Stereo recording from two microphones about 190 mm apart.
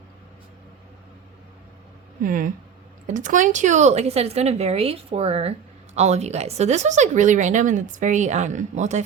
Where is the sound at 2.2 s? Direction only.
45° right (ahead or behind).